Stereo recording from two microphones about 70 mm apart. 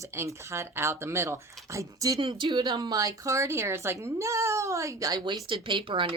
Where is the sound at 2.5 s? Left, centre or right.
Right.